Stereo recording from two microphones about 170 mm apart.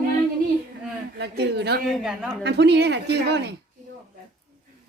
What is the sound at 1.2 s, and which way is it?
Speech, 85° right.